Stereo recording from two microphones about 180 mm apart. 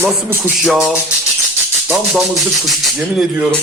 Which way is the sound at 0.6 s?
Centre (ahead or behind).